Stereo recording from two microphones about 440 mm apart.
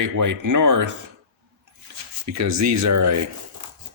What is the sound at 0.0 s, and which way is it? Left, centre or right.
Speech, right.